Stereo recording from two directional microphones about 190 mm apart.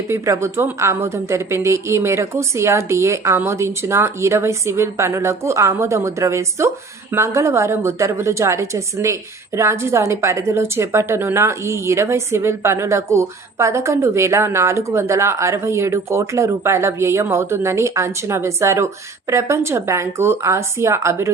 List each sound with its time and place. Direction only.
0.1 s a woman's voice: 15° right (ahead or behind)